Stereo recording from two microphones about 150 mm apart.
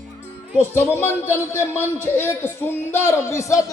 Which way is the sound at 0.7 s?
15° left (ahead or behind).